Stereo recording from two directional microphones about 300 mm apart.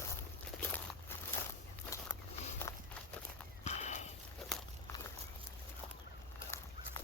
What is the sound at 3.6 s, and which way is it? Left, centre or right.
Horse, left.